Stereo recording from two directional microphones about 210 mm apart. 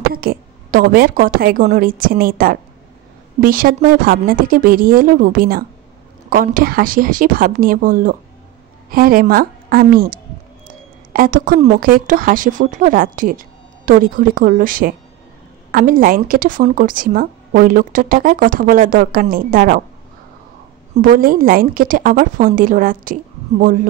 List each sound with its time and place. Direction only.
0.1 s a woman's voice: 45° right (ahead or behind)
11.1 s speech: 40° right (ahead or behind)
20.9 s speech: 40° right (ahead or behind)